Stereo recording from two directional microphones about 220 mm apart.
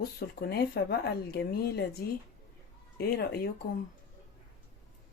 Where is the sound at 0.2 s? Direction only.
45° left (ahead or behind).